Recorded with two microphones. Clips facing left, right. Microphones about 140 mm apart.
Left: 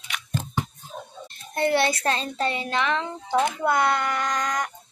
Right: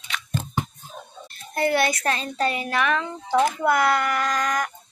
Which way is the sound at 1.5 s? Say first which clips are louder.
Even; 25° left (ahead or behind).